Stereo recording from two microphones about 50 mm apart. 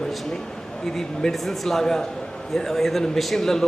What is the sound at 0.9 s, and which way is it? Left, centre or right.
A man's voice, centre.